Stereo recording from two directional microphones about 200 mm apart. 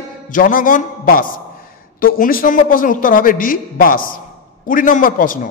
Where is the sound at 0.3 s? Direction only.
45° left (ahead or behind).